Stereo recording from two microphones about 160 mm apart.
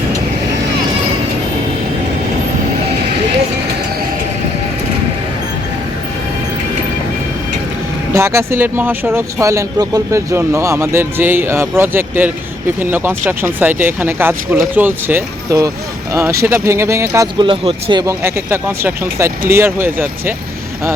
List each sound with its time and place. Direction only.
8.1 s speech: 20° right (ahead or behind)
17.4 s speech: 35° right (ahead or behind)
18.0 s speech: 15° right (ahead or behind)